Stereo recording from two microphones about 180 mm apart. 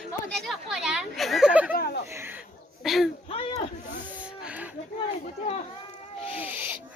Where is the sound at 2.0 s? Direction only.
15° right (ahead or behind).